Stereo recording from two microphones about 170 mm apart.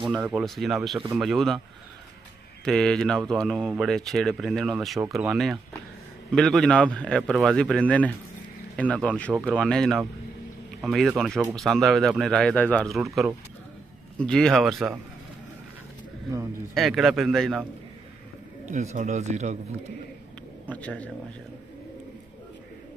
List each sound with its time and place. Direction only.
0.0 s speech: 10° right (ahead or behind)
2.6 s speech: 5° left (ahead or behind)
16.7 s speech: centre (ahead or behind)
18.7 s a man's voice: 45° right (ahead or behind)
20.6 s a man's voice: 10° left (ahead or behind)